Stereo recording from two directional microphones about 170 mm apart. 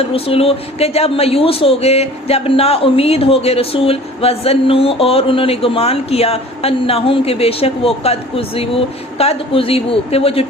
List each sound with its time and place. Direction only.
0.0 s a woman's voice: 35° left (ahead or behind)